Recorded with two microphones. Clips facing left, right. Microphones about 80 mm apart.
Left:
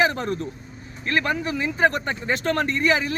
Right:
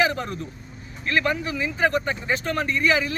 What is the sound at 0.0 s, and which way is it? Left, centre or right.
Vehicle, left.